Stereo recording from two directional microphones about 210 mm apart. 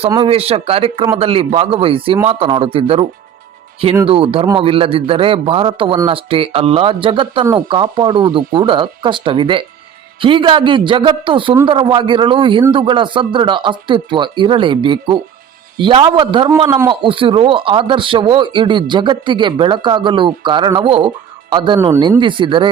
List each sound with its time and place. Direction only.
0.1 s a man's voice: 25° right (ahead or behind)